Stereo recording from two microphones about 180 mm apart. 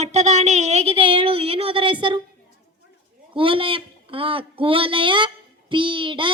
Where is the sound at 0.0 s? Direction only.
40° right (ahead or behind).